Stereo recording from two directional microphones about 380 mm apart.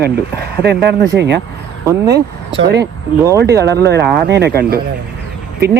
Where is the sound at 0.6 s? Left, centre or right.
Right.